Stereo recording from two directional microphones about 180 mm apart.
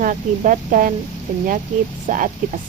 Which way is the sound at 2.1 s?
45° right (ahead or behind).